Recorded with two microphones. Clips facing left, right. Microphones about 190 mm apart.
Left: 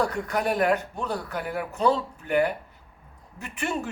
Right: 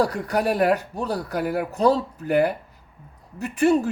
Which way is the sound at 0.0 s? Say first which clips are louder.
Right 4 dB; 35° right (ahead or behind).